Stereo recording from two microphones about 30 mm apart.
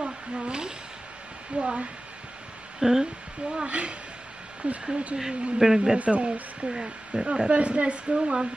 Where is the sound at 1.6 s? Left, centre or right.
Right.